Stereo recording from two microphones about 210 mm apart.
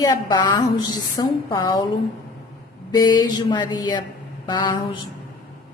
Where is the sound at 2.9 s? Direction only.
20° left (ahead or behind).